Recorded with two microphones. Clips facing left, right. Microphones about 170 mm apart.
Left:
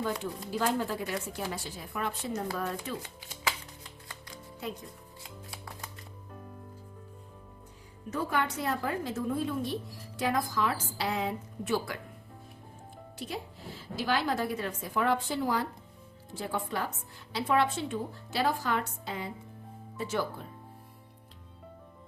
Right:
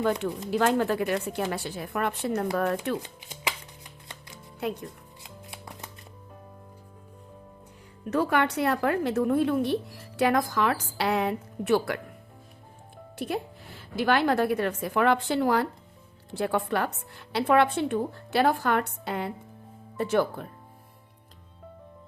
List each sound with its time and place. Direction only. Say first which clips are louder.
0.5 s a woman's voice: right 6 dB; 70° right (ahead or behind)
3.0 s speech: right 1 dB; 20° right (ahead or behind)
4.6 s a woman's voice: right 7 dB; 65° right (ahead or behind)
8.1 s a woman's voice: right 7 dB; 70° right (ahead or behind)
13.1 s a woman's voice: right 8 dB; 60° right (ahead or behind)